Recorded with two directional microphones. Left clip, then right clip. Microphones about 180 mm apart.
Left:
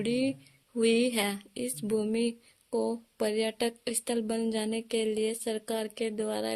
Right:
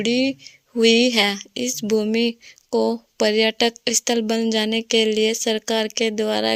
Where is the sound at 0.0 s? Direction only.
35° right (ahead or behind).